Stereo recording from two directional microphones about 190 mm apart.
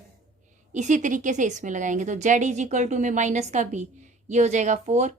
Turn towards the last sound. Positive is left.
turn(degrees=-40)  # may be behind; listen again after turning